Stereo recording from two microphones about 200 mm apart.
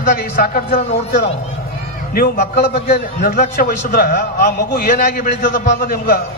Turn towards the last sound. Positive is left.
turn(degrees=50)  # may be behind; listen again after turning